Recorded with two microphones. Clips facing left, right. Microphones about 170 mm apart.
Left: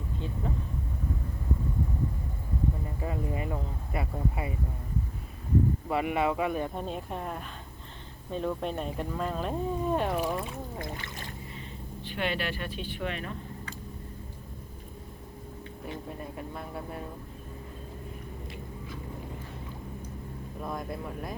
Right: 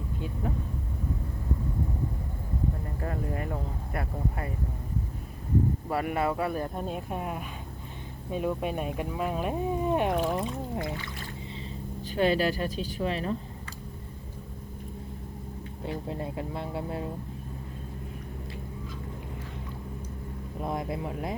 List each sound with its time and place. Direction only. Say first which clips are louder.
3.0 s speech: right 1 dB; 5° left (ahead or behind)
5.9 s speech: left 1 dB; 10° left (ahead or behind)
6.7 s speech: right 2 dB; 5° right (ahead or behind)
10.2 s speech: right 3 dB; centre (ahead or behind)
12.0 s speech: right 7 dB; 40° right (ahead or behind)
15.8 s speech: right 5 dB; 25° right (ahead or behind)
20.6 s speech: right 4 dB; 20° right (ahead or behind)